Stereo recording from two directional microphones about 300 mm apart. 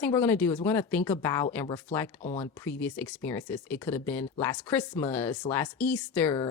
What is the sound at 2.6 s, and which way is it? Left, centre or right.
Speech, centre.